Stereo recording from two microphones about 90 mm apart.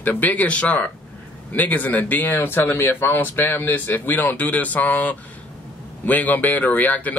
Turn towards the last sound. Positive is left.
turn(degrees=20)  # may be behind; listen again after turning